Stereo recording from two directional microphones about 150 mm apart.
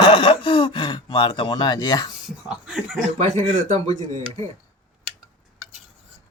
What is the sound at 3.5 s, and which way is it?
Speech, 55° right (ahead or behind).